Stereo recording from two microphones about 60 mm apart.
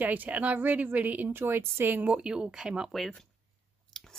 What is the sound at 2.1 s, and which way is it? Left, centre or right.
Speech, centre.